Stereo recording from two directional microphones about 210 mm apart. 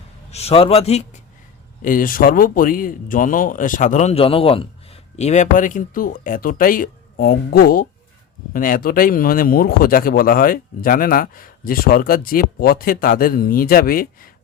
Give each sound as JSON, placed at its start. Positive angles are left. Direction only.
{"t": 0.3, "sound": "a man's voice", "side_deg": 30}